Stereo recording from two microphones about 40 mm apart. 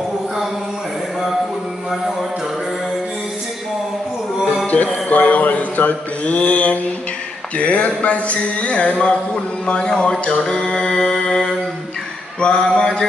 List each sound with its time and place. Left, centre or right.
5.0 s mantra: left
7.5 s speech: left
10.6 s music: centre
12.4 s a sound: left